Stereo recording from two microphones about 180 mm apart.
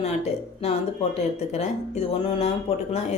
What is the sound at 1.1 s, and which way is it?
Speech, 35° left (ahead or behind).